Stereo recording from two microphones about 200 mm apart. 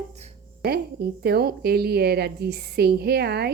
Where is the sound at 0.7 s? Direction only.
50° right (ahead or behind).